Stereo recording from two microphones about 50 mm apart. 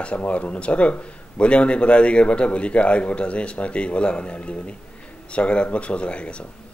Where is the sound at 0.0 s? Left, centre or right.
Left.